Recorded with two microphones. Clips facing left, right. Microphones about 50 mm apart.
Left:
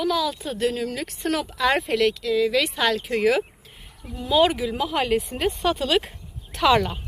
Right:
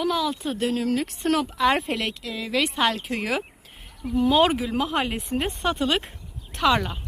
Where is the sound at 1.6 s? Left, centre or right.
Right.